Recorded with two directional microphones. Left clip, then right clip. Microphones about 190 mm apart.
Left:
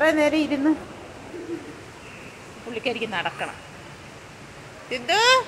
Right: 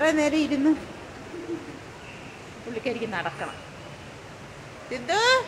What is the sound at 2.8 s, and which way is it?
Speech, 5° right (ahead or behind).